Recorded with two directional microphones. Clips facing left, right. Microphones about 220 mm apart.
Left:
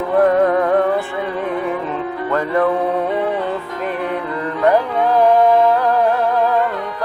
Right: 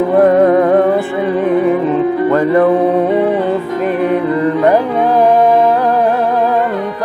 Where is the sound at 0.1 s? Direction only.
15° right (ahead or behind).